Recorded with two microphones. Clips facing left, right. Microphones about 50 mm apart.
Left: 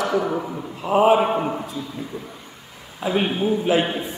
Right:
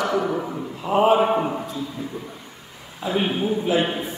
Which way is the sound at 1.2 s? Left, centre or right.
Centre.